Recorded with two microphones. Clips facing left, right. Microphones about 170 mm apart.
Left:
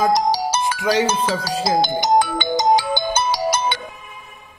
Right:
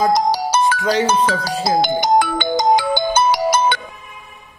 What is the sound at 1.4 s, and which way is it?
Ringtone, 55° right (ahead or behind).